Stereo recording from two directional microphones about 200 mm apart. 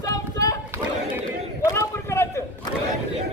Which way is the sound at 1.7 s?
15° left (ahead or behind).